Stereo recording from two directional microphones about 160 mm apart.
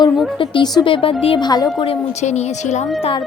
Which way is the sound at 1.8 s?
40° left (ahead or behind).